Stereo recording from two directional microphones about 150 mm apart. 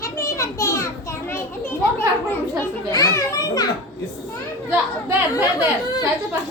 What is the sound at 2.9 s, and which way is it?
Children playing, 25° left (ahead or behind).